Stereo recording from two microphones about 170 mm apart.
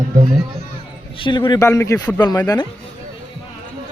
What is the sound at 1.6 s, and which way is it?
Speech, 15° left (ahead or behind).